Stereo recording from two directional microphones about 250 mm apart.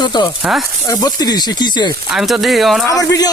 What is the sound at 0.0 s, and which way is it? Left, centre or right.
Speech, centre.